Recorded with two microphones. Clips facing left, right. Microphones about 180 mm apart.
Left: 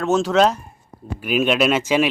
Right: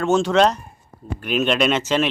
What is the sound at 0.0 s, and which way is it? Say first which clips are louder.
Speech: even; centre (ahead or behind).